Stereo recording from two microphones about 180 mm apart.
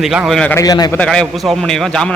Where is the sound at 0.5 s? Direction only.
20° left (ahead or behind).